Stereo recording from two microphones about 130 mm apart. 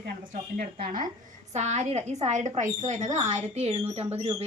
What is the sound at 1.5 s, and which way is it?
A woman's voice, 60° right (ahead or behind).